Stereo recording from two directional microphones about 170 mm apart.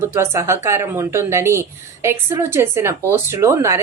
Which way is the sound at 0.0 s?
15° right (ahead or behind).